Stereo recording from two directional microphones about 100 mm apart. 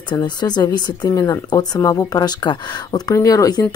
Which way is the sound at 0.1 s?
45° left (ahead or behind).